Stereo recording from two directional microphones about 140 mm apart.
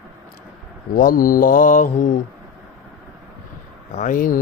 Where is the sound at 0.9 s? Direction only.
80° left; by 2.1 s 65° left (ahead or behind).